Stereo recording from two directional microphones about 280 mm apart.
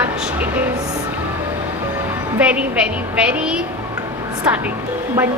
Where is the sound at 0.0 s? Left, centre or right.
Centre.